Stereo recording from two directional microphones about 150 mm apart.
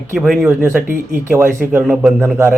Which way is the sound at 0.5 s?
15° right (ahead or behind).